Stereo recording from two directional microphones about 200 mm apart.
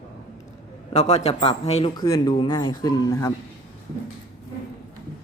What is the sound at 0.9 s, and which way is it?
A man's voice, 35° left (ahead or behind).